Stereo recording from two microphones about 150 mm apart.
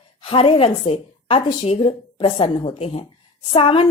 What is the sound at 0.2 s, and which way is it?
A woman's voice, 35° left (ahead or behind).